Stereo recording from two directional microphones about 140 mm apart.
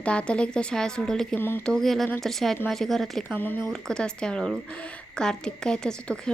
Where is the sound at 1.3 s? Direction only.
15° left (ahead or behind).